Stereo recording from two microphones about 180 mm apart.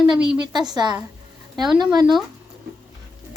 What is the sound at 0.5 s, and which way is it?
A woman's voice, 25° right (ahead or behind).